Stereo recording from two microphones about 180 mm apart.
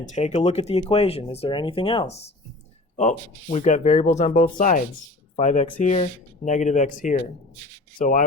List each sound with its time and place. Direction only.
0.0 s speech: 40° left (ahead or behind)